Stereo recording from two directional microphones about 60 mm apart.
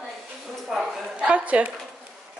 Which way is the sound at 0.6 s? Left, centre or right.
Centre.